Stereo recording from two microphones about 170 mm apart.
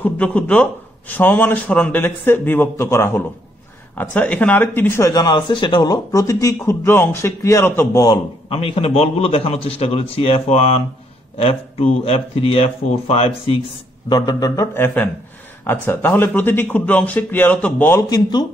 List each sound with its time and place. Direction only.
0.0 s speech: 10° left (ahead or behind)
8.5 s a man's voice: 35° left (ahead or behind)
14.0 s speech: 25° left (ahead or behind)
18.1 s speech: 25° left (ahead or behind)